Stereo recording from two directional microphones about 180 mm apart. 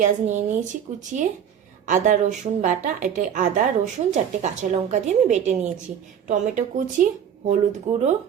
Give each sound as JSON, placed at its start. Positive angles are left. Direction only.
{"t": 0.0, "sound": "speech", "side_deg": -45}
{"t": 1.9, "sound": "speech", "side_deg": -45}